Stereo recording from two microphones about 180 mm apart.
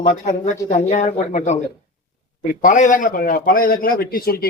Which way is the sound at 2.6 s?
45° left (ahead or behind).